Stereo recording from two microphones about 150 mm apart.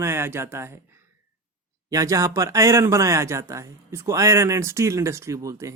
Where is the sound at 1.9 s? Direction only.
20° right (ahead or behind).